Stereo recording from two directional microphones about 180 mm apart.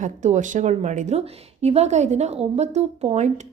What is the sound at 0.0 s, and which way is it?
A woman's voice, 45° right (ahead or behind).